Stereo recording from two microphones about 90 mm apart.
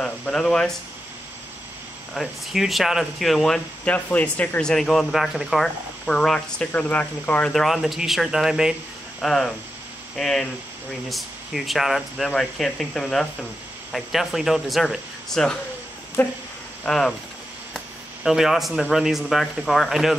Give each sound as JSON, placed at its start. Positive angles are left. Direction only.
{"t": 0.0, "sound": "speech", "side_deg": 10}
{"t": 2.1, "sound": "speech", "side_deg": 0}
{"t": 7.5, "sound": "speech", "side_deg": 0}
{"t": 9.2, "sound": "speech", "side_deg": 5}
{"t": 16.2, "sound": "speech", "side_deg": 25}
{"t": 16.8, "sound": "speech", "side_deg": 5}